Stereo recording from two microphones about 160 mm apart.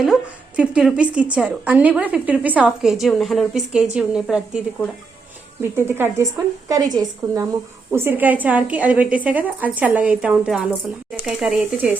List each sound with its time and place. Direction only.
0.0 s a woman's voice: 5° right (ahead or behind)
5.7 s a woman's voice: 15° right (ahead or behind)